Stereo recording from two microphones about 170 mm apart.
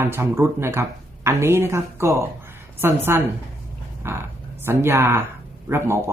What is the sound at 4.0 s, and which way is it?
Speech, 15° right (ahead or behind).